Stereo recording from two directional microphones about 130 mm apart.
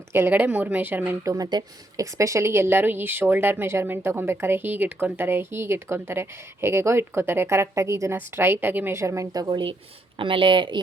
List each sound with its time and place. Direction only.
0.1 s a woman's voice: 15° right (ahead or behind)
1.3 s speech: 30° right (ahead or behind)